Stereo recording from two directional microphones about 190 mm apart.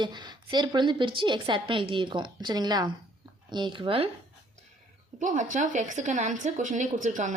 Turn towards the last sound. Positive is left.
turn(degrees=-40)  # may be behind; listen again after turning